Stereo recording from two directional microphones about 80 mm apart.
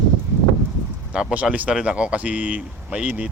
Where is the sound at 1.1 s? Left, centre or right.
Centre.